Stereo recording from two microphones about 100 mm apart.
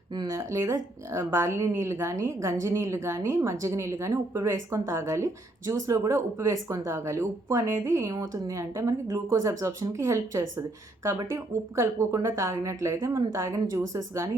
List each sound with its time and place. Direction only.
0.1 s speech: 45° right (ahead or behind)
0.3 s a woman's voice: 30° right (ahead or behind)
11.8 s a woman's voice: 30° right (ahead or behind)